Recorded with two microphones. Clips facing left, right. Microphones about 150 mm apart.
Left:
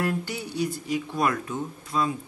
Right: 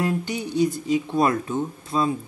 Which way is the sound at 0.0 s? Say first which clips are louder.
Right 3 dB; 20° right (ahead or behind).